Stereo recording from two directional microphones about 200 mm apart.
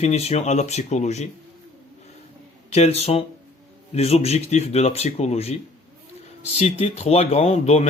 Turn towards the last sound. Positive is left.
turn(degrees=30)  # may be behind; listen again after turning